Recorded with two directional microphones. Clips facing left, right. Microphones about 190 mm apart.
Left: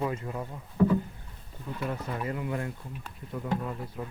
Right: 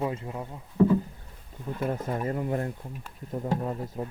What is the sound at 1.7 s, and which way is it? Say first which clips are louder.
Speech: right 4 dB; 45° right (ahead or behind).